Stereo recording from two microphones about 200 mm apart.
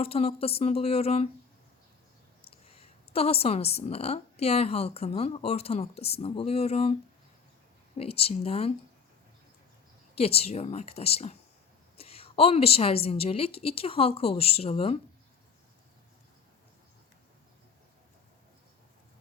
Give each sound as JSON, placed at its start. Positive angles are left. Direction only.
{"t": 0.0, "sound": "a woman's voice", "side_deg": 30}
{"t": 2.5, "sound": "a woman's voice", "side_deg": 30}
{"t": 7.9, "sound": "a woman's voice", "side_deg": 30}
{"t": 10.2, "sound": "a woman's voice", "side_deg": 30}